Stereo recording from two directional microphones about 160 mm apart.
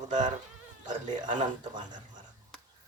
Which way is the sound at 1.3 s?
30° right (ahead or behind).